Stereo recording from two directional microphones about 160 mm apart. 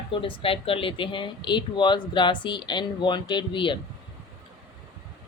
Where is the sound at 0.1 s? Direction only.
35° left (ahead or behind).